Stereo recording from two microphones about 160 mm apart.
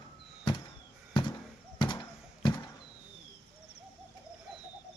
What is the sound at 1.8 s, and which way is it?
Fireworks, 30° left (ahead or behind).